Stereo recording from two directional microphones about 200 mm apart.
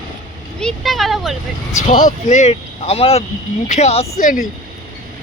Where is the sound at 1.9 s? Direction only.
40° left (ahead or behind).